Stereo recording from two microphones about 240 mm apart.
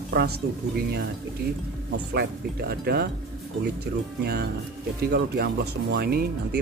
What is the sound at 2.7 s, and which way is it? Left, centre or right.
Speech, right.